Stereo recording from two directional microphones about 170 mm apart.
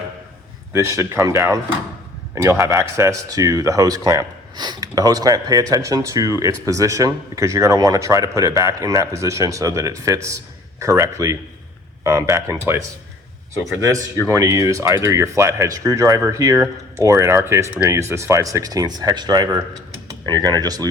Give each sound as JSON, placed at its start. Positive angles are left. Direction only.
{"t": 0.7, "sound": "speech", "side_deg": -15}